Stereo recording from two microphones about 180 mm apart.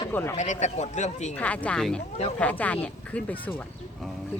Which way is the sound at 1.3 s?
10° left (ahead or behind).